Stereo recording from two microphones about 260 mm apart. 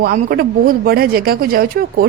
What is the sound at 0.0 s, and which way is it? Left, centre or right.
A woman's voice, right.